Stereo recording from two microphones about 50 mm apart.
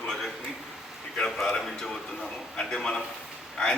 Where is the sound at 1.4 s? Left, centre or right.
Centre.